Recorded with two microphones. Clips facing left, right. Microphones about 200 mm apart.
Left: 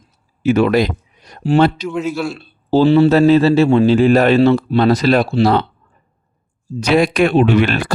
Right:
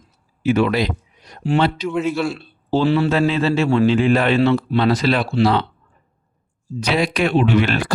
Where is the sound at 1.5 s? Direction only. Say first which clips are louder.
Left 5 dB; 40° left (ahead or behind).